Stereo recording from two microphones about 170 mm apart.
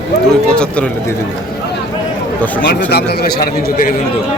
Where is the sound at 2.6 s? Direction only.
75° left (ahead or behind); by 3.9 s 55° left (ahead or behind).